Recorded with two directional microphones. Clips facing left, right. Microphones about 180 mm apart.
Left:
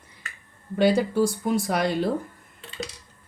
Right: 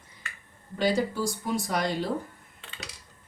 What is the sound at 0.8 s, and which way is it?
Speech, 55° left (ahead or behind).